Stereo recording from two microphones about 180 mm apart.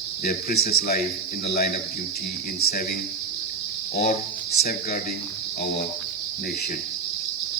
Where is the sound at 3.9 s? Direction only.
60° left (ahead or behind).